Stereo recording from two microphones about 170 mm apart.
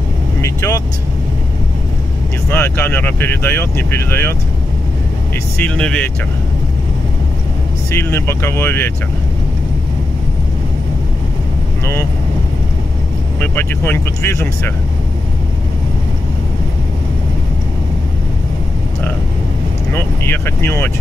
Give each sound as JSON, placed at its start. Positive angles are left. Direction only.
{"t": 0.4, "sound": "vehicle", "side_deg": 20}
{"t": 2.5, "sound": "speech", "side_deg": 10}
{"t": 5.6, "sound": "speech", "side_deg": 5}
{"t": 7.9, "sound": "speech", "side_deg": 15}
{"t": 13.4, "sound": "speech", "side_deg": 10}
{"t": 19.9, "sound": "speech", "side_deg": 15}